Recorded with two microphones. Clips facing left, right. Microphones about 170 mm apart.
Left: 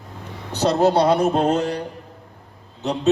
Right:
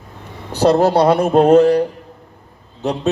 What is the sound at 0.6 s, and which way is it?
A man's voice, 55° right (ahead or behind).